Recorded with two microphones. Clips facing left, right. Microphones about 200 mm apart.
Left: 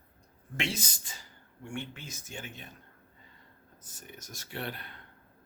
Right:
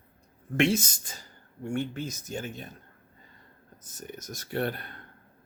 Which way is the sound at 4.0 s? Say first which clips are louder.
Right 8 dB; 40° right (ahead or behind).